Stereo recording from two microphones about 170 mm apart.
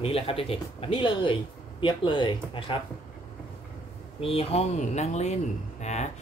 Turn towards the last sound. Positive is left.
turn(degrees=40)  # may be behind; listen again after turning